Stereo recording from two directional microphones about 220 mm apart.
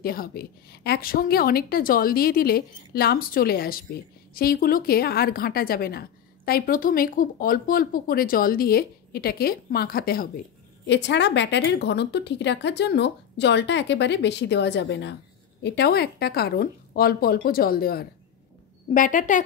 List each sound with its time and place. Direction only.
0.0 s a woman's voice: 40° left (ahead or behind)